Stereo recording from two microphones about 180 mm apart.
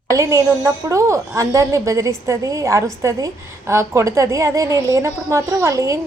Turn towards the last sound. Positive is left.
turn(degrees=-15)  # may be behind; listen again after turning